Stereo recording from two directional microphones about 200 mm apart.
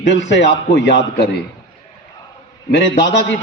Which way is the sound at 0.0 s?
65° left (ahead or behind).